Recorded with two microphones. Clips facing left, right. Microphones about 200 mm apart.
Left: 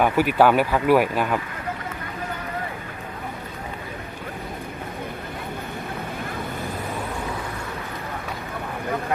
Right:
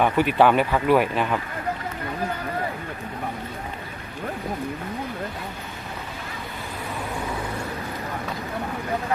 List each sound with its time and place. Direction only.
0.0 s speech: 5° left (ahead or behind)